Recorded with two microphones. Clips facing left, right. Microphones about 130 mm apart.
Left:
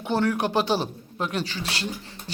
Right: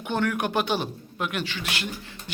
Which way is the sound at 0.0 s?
30° left (ahead or behind).